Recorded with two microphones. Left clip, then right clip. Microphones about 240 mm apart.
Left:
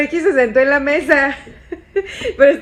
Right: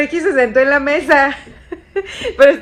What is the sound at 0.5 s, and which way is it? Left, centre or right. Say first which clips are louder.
A woman's voice: right 1 dB; centre.